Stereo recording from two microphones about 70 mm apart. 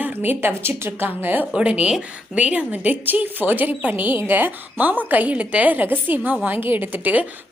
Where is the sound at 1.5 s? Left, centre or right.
Centre.